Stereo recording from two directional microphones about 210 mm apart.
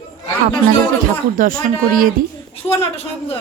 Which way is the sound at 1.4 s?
40° right (ahead or behind).